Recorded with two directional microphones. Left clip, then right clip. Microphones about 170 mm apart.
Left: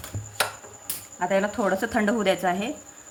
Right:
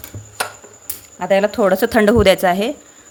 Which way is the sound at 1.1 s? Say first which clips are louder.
Right 9 dB; 60° right (ahead or behind).